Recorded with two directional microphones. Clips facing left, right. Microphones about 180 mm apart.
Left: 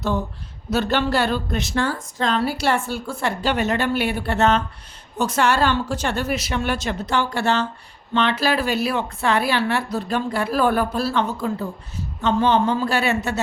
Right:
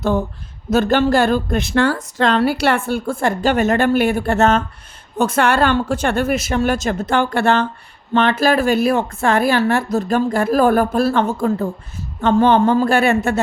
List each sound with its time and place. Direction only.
0.7 s a woman's voice: 45° right (ahead or behind)